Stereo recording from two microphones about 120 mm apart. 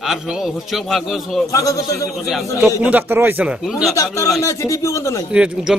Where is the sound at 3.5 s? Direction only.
5° right (ahead or behind).